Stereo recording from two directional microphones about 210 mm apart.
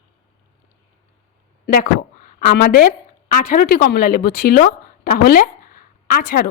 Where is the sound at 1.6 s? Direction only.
45° left (ahead or behind).